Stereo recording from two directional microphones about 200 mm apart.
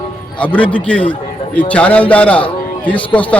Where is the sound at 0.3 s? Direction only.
5° left (ahead or behind).